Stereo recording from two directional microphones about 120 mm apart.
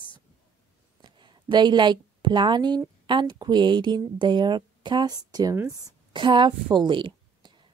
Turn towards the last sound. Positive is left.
turn(degrees=-40)  # may be behind; listen again after turning